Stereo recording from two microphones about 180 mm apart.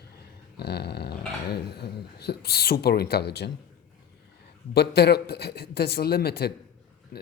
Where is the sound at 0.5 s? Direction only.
65° left (ahead or behind).